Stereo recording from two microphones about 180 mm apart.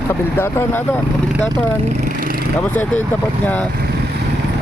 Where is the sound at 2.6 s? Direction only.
10° left (ahead or behind).